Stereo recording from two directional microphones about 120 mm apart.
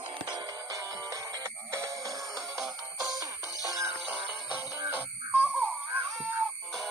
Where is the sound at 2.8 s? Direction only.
30° right (ahead or behind).